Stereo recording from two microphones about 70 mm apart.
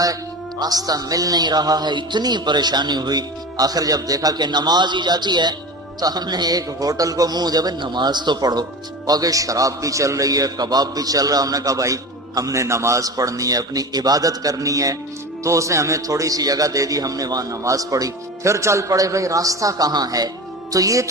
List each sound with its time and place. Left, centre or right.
0.6 s a man's voice: right
6.0 s a man's voice: right
9.0 s a man's voice: right
20.7 s a man's voice: right